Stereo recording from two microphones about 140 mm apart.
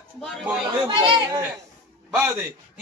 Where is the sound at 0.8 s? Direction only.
35° right (ahead or behind).